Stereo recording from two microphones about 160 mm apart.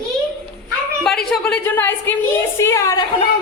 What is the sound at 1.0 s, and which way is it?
A woman's voice, 5° left (ahead or behind).